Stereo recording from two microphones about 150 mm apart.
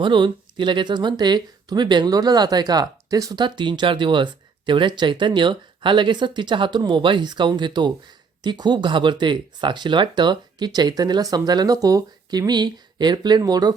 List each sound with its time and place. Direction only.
0.0 s speech: 35° right (ahead or behind)